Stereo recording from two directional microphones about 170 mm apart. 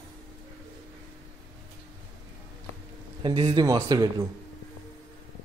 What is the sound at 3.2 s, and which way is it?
Speech, 30° right (ahead or behind).